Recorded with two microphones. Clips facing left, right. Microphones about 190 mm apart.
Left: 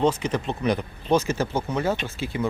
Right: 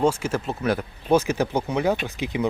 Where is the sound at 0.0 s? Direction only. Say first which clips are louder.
Even; 10° right (ahead or behind).